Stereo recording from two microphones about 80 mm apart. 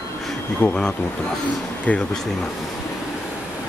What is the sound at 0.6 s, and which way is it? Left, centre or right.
Speech, centre.